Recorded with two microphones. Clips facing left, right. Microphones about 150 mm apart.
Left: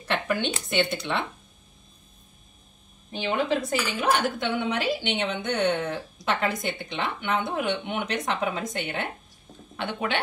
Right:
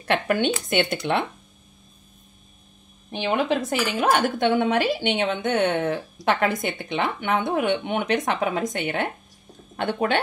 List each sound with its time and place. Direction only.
0.1 s speech: 60° right (ahead or behind)
3.1 s a woman's voice: 60° right (ahead or behind)
9.8 s a woman's voice: 45° right (ahead or behind)